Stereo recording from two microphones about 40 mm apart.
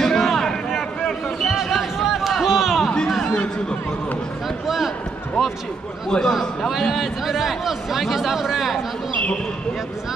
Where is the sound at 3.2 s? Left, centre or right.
Left.